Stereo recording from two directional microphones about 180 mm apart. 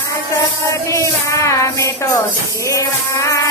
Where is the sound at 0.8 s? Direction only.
15° left (ahead or behind).